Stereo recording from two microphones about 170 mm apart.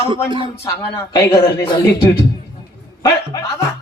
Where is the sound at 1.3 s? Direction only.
30° left (ahead or behind).